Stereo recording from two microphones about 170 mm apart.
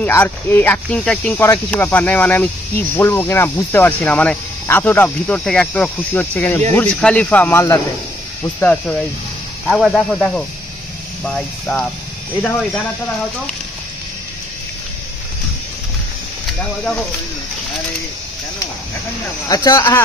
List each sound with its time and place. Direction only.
0.0 s speech: 10° left (ahead or behind)
16.5 s speech: 5° left (ahead or behind)
19.5 s speech: 20° left (ahead or behind)